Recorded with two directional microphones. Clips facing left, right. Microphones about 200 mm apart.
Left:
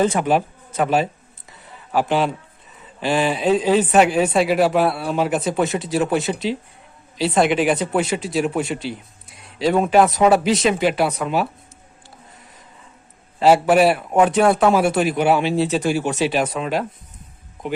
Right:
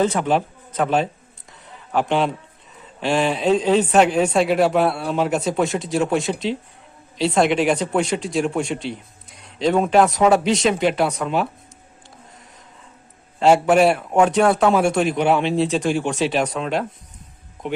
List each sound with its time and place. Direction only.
0.0 s speech: 10° left (ahead or behind)
1.5 s a sound: 5° left (ahead or behind)
3.0 s speech: centre (ahead or behind)
13.4 s speech: 5° left (ahead or behind)